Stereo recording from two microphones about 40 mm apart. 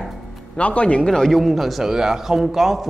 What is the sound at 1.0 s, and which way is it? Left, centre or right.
Speech, centre.